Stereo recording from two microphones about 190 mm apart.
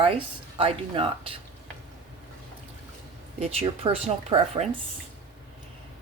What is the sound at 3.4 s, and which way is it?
Speech, 30° right (ahead or behind).